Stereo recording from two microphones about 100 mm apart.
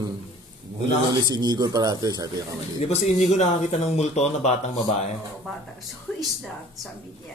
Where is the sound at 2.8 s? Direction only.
90° left.